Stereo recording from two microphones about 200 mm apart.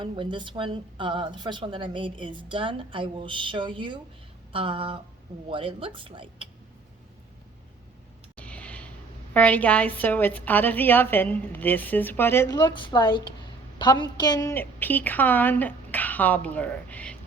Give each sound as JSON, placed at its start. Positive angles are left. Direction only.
{"t": 0.0, "sound": "a woman's voice", "side_deg": -25}
{"t": 8.4, "sound": "a sound", "side_deg": 5}
{"t": 9.3, "sound": "a woman's voice", "side_deg": 5}